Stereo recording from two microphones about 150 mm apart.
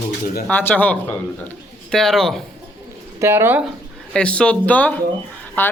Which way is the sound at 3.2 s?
15° right (ahead or behind).